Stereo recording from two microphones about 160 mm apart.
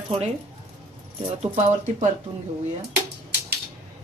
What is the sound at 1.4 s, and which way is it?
Speech, 45° right (ahead or behind).